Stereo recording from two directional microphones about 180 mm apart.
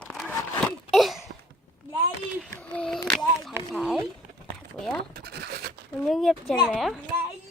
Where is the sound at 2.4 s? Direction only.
5° left (ahead or behind).